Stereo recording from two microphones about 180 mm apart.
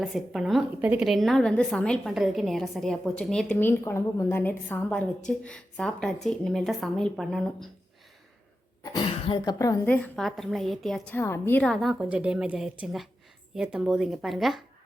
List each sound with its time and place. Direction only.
0.0 s a woman's voice: centre (ahead or behind)
8.8 s a woman's voice: 25° left (ahead or behind); by 14.6 s centre (ahead or behind)